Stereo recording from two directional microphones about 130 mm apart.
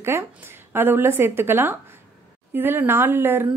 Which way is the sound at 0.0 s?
20° right (ahead or behind).